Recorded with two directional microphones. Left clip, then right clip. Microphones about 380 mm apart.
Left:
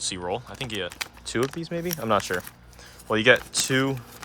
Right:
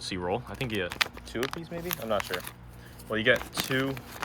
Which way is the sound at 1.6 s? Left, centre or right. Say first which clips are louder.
Left 7 dB; centre.